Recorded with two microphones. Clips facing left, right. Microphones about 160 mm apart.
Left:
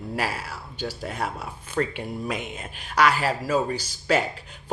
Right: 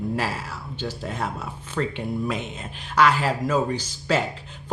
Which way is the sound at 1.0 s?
45° left (ahead or behind).